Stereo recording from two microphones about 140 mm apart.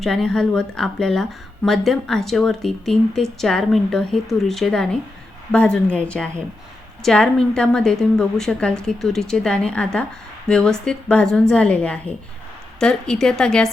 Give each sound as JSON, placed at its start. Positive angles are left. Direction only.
{"t": 0.0, "sound": "a woman's voice", "side_deg": 5}